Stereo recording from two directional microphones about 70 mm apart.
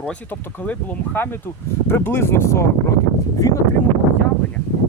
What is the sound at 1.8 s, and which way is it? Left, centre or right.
Speech, left.